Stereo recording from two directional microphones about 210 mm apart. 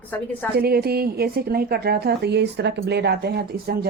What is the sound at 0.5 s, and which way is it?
A woman's voice, 50° right (ahead or behind).